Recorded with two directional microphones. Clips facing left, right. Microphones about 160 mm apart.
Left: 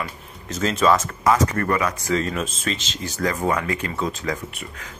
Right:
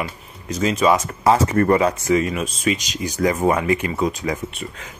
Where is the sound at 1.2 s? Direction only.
30° right (ahead or behind).